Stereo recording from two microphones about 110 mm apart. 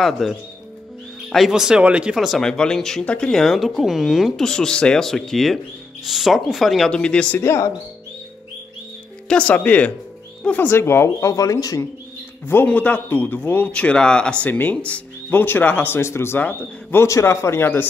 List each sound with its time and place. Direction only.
0.0 s speech: centre (ahead or behind)
7.3 s speech: 25° left (ahead or behind)
9.3 s a man's voice: 10° left (ahead or behind); by 11.9 s 30° left (ahead or behind)
12.4 s a man's voice: 15° left (ahead or behind)